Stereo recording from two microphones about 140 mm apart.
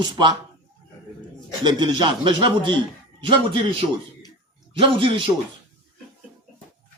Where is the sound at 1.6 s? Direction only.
35° right (ahead or behind).